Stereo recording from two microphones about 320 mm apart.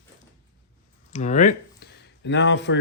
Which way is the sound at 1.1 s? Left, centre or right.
Left.